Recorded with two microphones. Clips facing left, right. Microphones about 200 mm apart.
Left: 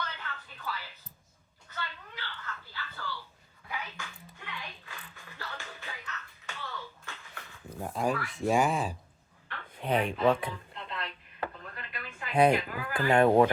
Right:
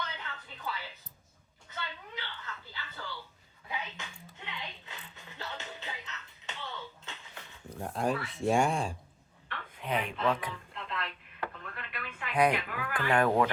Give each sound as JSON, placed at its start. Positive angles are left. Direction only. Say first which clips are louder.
{"t": 0.0, "sound": "a sound", "louder": "left 1 dB", "side_deg": -20}
{"t": 3.7, "sound": "music", "louder": "even", "side_deg": -20}
{"t": 7.7, "sound": "speech", "louder": "left 1 dB", "side_deg": 0}
{"t": 9.7, "sound": "fowl", "louder": "left 4 dB", "side_deg": 35}
{"t": 10.5, "sound": "a sound", "louder": "even", "side_deg": 0}
{"t": 12.3, "sound": "speech", "louder": "left 4 dB", "side_deg": 25}
{"t": 12.5, "sound": "speech", "louder": "left 3 dB", "side_deg": 0}
{"t": 12.9, "sound": "speech", "louder": "left 4 dB", "side_deg": 25}